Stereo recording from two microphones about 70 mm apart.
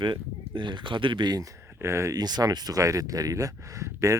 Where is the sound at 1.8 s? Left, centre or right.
Right.